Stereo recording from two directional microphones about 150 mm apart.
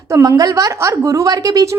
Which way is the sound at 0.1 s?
20° right (ahead or behind).